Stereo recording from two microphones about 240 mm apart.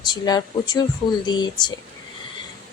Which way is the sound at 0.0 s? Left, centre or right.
Centre.